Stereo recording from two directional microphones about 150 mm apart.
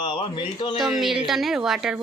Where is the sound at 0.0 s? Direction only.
35° left (ahead or behind).